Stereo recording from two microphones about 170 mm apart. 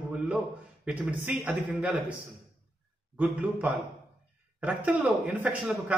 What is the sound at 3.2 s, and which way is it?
A man's voice, 10° right (ahead or behind).